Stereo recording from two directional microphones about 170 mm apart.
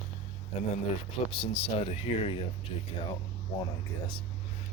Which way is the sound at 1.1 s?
35° left (ahead or behind).